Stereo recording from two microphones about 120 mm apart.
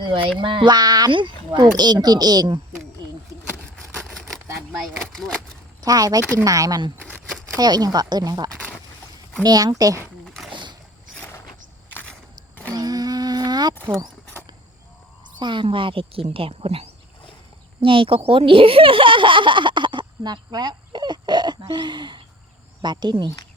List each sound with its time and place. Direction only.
0.0 s speech: 40° right (ahead or behind)
3.9 s a sound: 5° left (ahead or behind)
5.8 s speech: 30° right (ahead or behind)
10.2 s a sound: centre (ahead or behind)
10.5 s rowboat: 40° right (ahead or behind)
12.7 s humming: 30° right (ahead or behind)
15.2 s speech: 40° right (ahead or behind)